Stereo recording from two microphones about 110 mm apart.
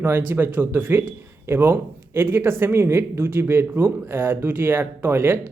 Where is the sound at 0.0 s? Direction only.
20° right (ahead or behind).